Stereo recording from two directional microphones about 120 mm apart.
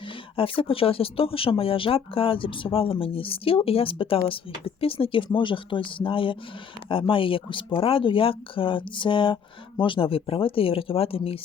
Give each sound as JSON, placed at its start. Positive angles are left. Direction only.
{"t": 0.3, "sound": "speech", "side_deg": 50}